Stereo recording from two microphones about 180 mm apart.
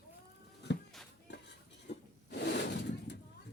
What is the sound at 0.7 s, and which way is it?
Music, 75° left (ahead or behind).